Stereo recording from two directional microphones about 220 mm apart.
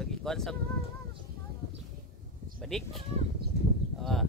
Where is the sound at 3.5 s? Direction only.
45° left (ahead or behind).